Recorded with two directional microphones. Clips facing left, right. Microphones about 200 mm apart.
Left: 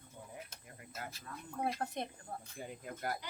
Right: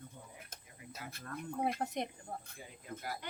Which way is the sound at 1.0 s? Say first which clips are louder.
Right 3 dB; 60° right (ahead or behind).